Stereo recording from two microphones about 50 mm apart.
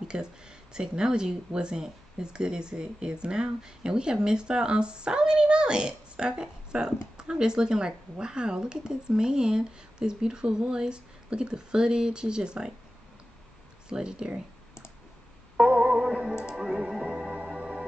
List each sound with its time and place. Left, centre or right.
0.1 s speech: centre
13.8 s speech: centre
15.5 s music: right